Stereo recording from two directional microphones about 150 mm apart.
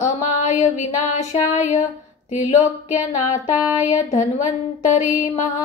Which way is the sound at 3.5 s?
10° right (ahead or behind).